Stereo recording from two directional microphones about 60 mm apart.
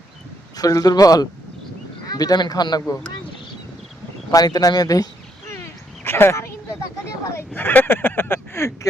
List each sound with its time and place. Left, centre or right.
0.5 s speech: left
2.0 s speech: left
4.3 s speech: left
6.1 s a sound: left
7.3 s speech: left